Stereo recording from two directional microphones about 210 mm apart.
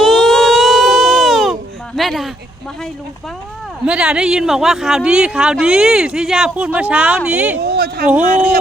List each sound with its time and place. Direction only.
0.0 s baby cry: centre (ahead or behind)
2.0 s speech: centre (ahead or behind)
3.8 s speech: 5° right (ahead or behind)
7.6 s speech: 50° right (ahead or behind)
8.0 s speech: 5° right (ahead or behind)